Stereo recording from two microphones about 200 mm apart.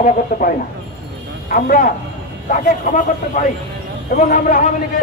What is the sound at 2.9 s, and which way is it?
Speech, 40° left (ahead or behind).